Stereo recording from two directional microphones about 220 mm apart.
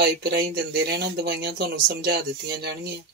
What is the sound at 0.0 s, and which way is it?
Speech, 50° right (ahead or behind).